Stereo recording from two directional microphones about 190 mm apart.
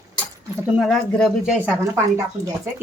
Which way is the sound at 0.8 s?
Centre (ahead or behind).